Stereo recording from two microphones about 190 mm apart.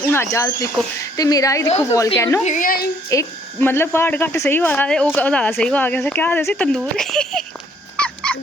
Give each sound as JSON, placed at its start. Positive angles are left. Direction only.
{"t": 0.0, "sound": "speech", "side_deg": 10}
{"t": 2.4, "sound": "a child's voice", "side_deg": 40}
{"t": 3.1, "sound": "speech", "side_deg": 15}
{"t": 7.9, "sound": "dog", "side_deg": 5}